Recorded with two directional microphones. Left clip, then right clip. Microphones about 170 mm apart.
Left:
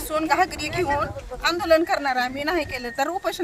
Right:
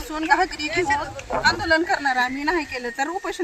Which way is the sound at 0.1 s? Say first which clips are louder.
Right 1 dB; 35° left (ahead or behind).